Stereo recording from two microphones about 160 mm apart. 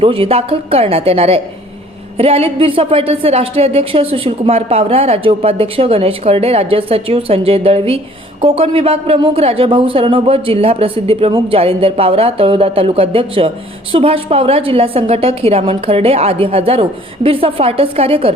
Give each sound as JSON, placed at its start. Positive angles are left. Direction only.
{"t": 0.0, "sound": "a woman's voice", "side_deg": -35}